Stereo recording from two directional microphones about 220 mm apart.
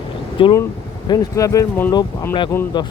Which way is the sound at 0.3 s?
25° left (ahead or behind).